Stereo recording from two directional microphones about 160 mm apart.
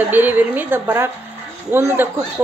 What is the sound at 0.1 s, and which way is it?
A woman's voice, 10° right (ahead or behind).